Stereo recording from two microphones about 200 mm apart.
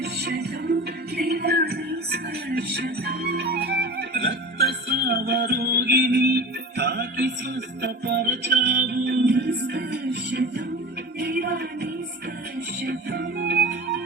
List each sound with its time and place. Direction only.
0.0 s music: 55° right (ahead or behind)